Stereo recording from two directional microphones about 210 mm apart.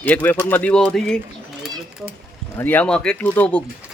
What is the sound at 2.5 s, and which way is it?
Speech, 10° left (ahead or behind).